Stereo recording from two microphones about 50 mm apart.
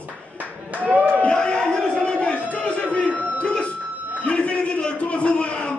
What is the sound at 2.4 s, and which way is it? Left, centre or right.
Chatter, left.